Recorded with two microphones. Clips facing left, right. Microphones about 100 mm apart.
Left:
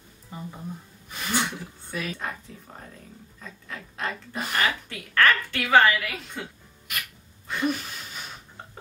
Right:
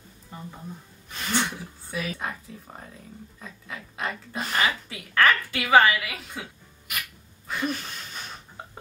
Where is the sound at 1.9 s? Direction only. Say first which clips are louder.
Right 1 dB; 5° right (ahead or behind).